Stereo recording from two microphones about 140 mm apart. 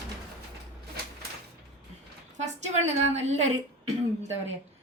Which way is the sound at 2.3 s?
55° right (ahead or behind).